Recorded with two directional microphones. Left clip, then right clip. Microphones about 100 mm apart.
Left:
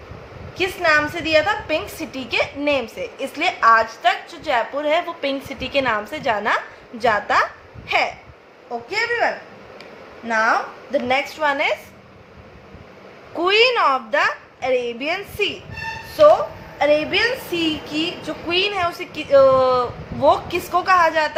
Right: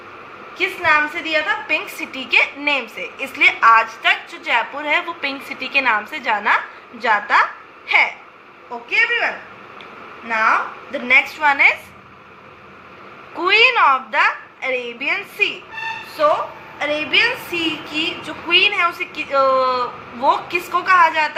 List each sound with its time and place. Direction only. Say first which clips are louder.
0.5 s a woman's voice: right 1 dB; 35° left (ahead or behind)
8.9 s a woman's voice: right 3 dB; 25° left (ahead or behind)
13.4 s a woman's voice: right 3 dB; 35° left (ahead or behind)
16.7 s a woman's voice: even; 30° left (ahead or behind)